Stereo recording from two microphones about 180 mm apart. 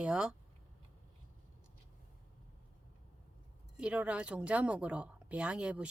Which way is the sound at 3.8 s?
5° right (ahead or behind).